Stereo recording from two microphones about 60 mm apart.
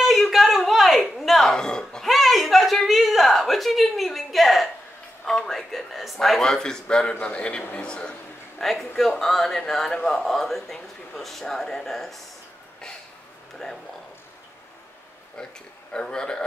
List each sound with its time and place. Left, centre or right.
0.0 s music: centre
2.0 s a sound: centre
8.6 s speech: centre
15.9 s a man's voice: centre